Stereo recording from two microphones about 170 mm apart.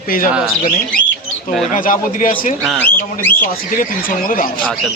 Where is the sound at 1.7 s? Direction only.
50° left (ahead or behind).